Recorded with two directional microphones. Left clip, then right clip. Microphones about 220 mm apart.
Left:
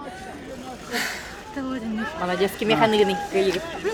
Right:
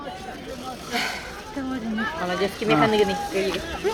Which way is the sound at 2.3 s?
50° left (ahead or behind).